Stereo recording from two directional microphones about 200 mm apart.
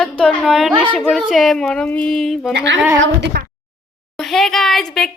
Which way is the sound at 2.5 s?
60° right (ahead or behind).